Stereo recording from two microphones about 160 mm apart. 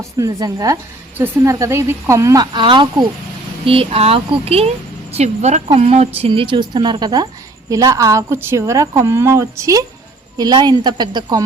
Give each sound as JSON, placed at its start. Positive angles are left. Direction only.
{"t": 0.2, "sound": "a woman's voice", "side_deg": -25}